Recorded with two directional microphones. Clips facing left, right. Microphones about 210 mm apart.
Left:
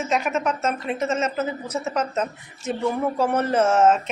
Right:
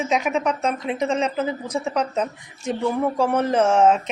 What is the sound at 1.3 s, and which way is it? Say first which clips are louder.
Speech: right 2 dB; 10° right (ahead or behind).